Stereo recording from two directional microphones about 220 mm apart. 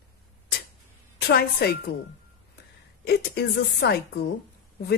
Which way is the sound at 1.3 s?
45° left (ahead or behind).